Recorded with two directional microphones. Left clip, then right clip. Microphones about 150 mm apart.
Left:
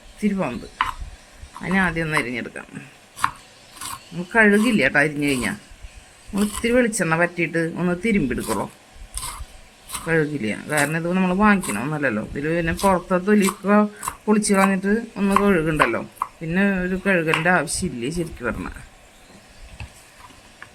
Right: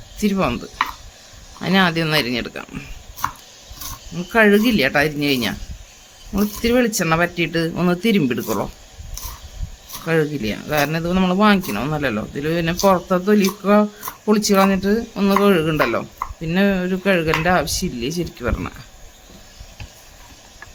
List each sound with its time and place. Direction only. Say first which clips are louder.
0.2 s speech: right 5 dB; 40° right (ahead or behind)
1.6 s speech: right 4 dB; 35° right (ahead or behind)
4.3 s speech: right 2 dB; 25° right (ahead or behind)
10.1 s speech: right 2 dB; 20° right (ahead or behind)